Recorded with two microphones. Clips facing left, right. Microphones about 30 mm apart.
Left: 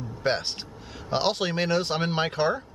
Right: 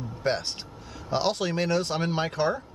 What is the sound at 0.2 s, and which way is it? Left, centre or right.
Speech, centre.